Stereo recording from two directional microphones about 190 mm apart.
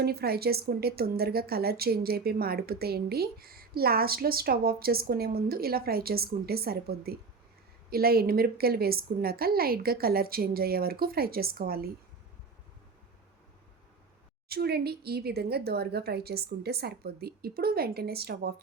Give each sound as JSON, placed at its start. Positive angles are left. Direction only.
{"t": 0.0, "sound": "speech", "side_deg": -55}
{"t": 14.5, "sound": "speech", "side_deg": -55}